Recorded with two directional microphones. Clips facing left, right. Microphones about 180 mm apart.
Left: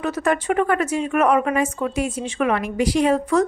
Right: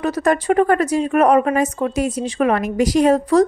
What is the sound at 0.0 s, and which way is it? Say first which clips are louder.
A woman's voice: right 3 dB; 40° right (ahead or behind).